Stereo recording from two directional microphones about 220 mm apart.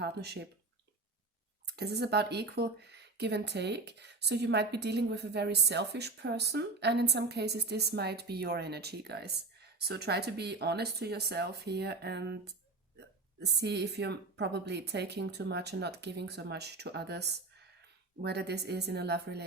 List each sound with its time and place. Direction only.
0.0 s speech: 45° right (ahead or behind)
1.7 s speech: 45° right (ahead or behind)
13.4 s speech: 50° right (ahead or behind)